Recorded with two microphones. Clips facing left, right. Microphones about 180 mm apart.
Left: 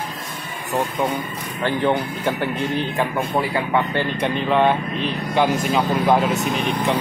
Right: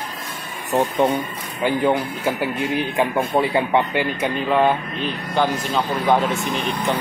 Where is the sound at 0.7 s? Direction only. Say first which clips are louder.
Right 3 dB; 20° right (ahead or behind).